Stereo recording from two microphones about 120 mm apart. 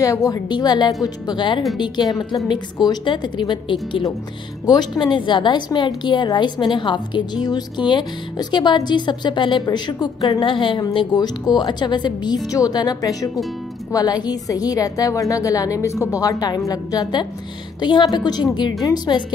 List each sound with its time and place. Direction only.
0.0 s a woman's voice: 30° left (ahead or behind)